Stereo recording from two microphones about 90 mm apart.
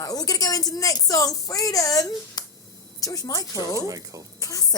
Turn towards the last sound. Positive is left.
turn(degrees=40)  # may be behind; listen again after turning